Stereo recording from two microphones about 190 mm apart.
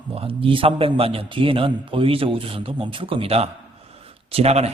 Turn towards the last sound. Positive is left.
turn(degrees=-35)  # may be behind; listen again after turning